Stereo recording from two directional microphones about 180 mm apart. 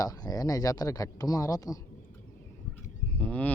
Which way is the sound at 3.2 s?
10° left (ahead or behind).